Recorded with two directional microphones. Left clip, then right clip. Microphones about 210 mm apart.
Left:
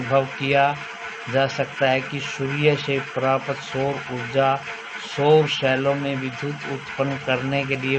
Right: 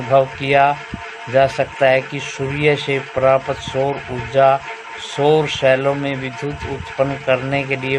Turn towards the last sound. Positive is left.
turn(degrees=-50)  # may be behind; listen again after turning